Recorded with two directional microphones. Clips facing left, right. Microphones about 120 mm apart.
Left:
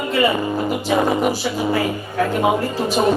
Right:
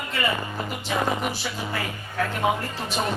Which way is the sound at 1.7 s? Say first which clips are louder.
Left 11 dB; 20° left (ahead or behind).